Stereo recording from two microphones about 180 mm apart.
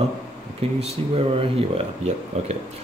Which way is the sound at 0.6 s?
30° right (ahead or behind).